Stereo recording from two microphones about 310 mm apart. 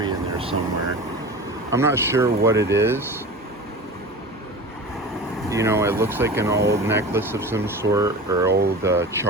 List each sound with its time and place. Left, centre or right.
0.0 s vehicle: centre
1.7 s speech: centre
5.5 s speech: centre
8.4 s speech: right
8.8 s speech: centre